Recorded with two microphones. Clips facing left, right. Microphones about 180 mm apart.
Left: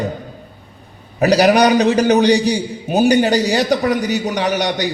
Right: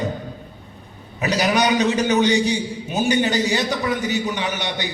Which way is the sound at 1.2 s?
35° left (ahead or behind).